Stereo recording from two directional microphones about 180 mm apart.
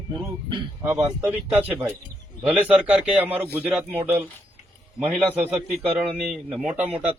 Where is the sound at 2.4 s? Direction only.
5° right (ahead or behind).